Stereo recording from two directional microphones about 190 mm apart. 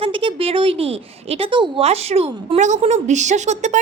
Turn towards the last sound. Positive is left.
turn(degrees=-40)  # may be behind; listen again after turning